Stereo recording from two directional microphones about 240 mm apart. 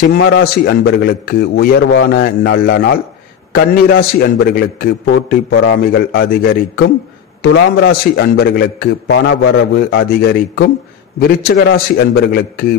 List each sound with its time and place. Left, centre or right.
0.0 s a man's voice: left